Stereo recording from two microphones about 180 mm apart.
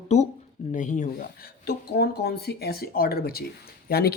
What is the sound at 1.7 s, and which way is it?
Speech, 60° left (ahead or behind).